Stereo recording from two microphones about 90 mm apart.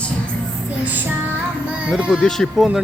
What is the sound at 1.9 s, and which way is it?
Music, 10° right (ahead or behind).